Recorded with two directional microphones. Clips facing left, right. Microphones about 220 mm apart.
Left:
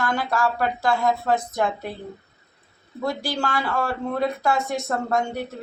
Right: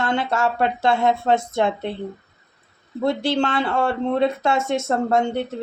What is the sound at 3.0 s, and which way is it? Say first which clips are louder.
Speech: right 6 dB; 25° right (ahead or behind).